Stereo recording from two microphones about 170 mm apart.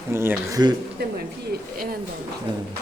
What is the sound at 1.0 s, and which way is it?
Speech, 70° right (ahead or behind).